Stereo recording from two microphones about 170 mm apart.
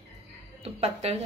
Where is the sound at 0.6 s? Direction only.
40° right (ahead or behind).